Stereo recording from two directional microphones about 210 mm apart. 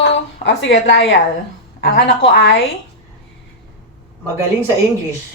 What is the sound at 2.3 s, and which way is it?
Speech, 55° left (ahead or behind).